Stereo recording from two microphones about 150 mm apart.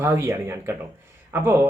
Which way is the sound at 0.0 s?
20° right (ahead or behind).